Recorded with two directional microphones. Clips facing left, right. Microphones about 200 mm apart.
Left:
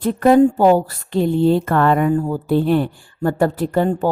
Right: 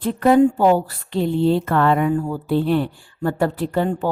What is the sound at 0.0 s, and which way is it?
Speech, 45° left (ahead or behind).